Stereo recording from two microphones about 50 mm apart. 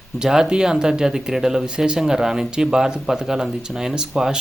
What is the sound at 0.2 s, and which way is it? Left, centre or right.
Speech, centre.